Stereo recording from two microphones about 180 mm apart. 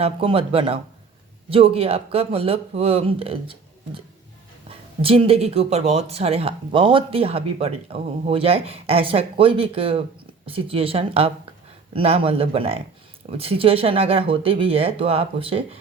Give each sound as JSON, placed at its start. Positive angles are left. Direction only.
{"t": 0.0, "sound": "speech", "side_deg": -30}
{"t": 5.0, "sound": "speech", "side_deg": -30}